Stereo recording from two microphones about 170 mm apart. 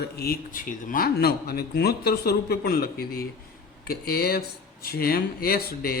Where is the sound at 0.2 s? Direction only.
55° left (ahead or behind).